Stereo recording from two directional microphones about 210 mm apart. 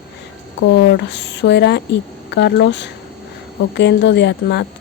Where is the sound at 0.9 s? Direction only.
55° left (ahead or behind).